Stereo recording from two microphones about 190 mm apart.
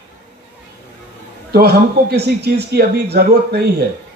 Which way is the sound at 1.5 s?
60° right (ahead or behind).